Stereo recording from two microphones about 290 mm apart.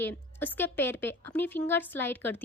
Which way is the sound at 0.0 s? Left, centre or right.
Centre.